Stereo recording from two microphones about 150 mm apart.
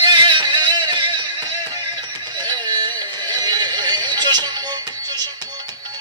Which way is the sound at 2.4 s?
30° right (ahead or behind).